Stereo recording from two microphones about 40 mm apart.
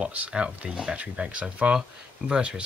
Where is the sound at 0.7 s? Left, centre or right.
Right.